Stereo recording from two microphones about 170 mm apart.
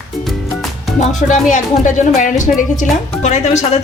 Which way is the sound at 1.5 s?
45° left (ahead or behind).